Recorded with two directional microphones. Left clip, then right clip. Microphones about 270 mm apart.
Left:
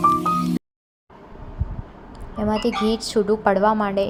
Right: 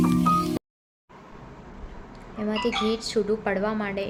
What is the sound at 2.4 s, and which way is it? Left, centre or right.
A woman's voice, centre.